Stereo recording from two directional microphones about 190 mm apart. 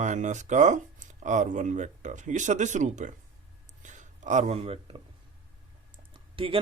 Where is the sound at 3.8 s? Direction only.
40° right (ahead or behind).